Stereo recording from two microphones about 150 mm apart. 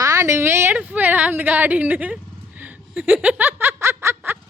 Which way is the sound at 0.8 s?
10° right (ahead or behind).